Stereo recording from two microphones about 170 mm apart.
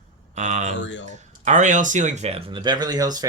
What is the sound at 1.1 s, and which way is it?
Speech, 45° right (ahead or behind).